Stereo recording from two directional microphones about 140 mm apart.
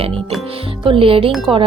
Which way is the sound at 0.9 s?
40° right (ahead or behind).